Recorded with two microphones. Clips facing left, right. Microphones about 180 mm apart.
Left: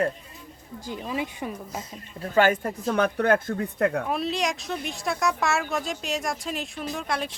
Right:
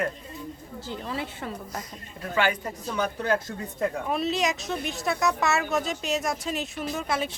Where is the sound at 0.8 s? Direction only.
15° left (ahead or behind).